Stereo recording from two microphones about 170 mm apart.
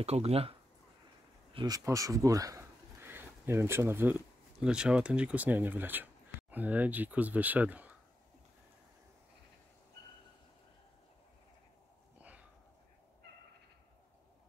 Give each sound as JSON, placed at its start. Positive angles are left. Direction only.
{"t": 0.0, "sound": "speech", "side_deg": -35}
{"t": 1.5, "sound": "speech", "side_deg": -25}